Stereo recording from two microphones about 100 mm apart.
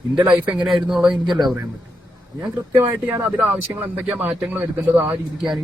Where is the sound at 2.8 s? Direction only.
20° right (ahead or behind).